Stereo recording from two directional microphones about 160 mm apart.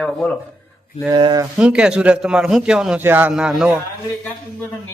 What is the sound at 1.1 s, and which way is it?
Speech, 30° right (ahead or behind).